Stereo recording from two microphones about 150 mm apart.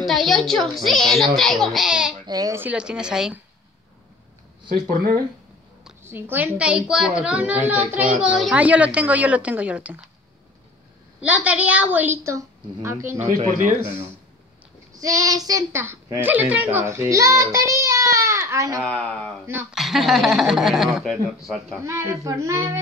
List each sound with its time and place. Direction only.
0.0 s a child's voice: centre (ahead or behind)
2.2 s a woman's voice: 25° right (ahead or behind)
2.6 s a child's voice: 5° right (ahead or behind)
4.8 s speech: 80° right
6.0 s a woman's voice: 15° right (ahead or behind)
11.1 s a woman's voice: 10° right (ahead or behind)
13.3 s speech: 55° right (ahead or behind)
15.0 s a woman's voice: 20° right (ahead or behind)
18.9 s a child's voice: 5° left (ahead or behind)
21.8 s a woman's voice: 20° right (ahead or behind)